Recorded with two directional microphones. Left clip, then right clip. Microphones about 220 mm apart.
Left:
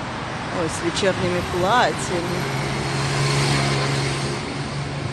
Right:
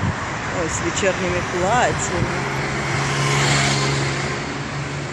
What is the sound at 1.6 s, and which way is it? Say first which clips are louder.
Speech: even; 10° left (ahead or behind).